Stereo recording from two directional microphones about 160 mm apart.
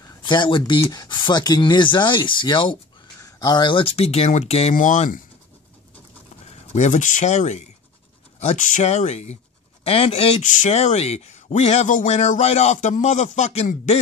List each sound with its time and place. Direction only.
0.0 s speech: 25° left (ahead or behind)
4.7 s speech: 55° left (ahead or behind)
6.4 s speech: 45° left (ahead or behind)